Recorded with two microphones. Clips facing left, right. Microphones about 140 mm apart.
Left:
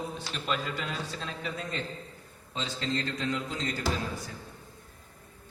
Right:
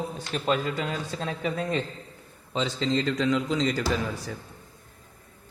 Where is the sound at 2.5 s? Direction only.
90° right.